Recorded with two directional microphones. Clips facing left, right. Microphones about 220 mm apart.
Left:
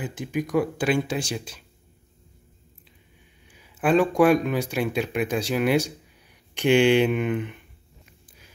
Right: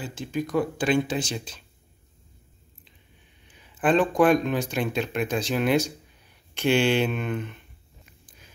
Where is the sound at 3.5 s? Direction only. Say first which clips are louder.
Left 1 dB; 10° left (ahead or behind).